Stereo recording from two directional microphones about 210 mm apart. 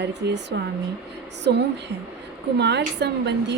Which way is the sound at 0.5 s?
55° right (ahead or behind).